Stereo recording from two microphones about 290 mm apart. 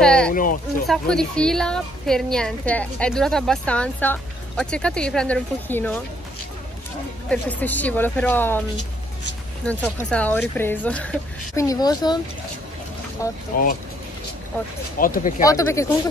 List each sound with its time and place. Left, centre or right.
0.0 s speech: centre
0.3 s speech: left
0.8 s a woman's voice: centre
7.2 s a woman's voice: centre
9.7 s a woman's voice: centre
13.2 s speech: centre
15.0 s speech: left
15.4 s speech: centre